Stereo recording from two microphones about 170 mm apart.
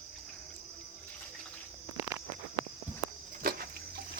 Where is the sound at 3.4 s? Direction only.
60° right (ahead or behind).